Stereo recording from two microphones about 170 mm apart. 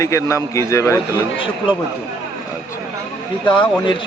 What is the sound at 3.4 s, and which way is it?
Speech, 30° left (ahead or behind).